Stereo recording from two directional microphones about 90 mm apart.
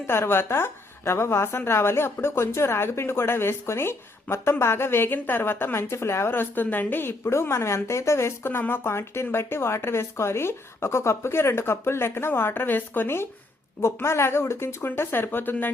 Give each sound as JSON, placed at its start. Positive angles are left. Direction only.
{"t": 0.1, "sound": "a woman's voice", "side_deg": 25}